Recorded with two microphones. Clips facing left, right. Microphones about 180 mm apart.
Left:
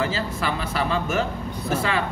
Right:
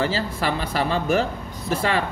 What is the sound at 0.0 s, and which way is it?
Speech, 35° right (ahead or behind).